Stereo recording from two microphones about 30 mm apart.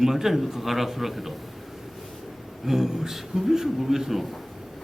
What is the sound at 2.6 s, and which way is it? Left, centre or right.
A man's voice, centre.